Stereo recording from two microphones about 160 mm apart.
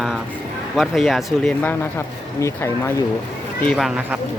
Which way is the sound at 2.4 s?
15° left (ahead or behind).